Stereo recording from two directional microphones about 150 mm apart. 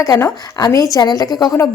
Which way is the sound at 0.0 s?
20° left (ahead or behind).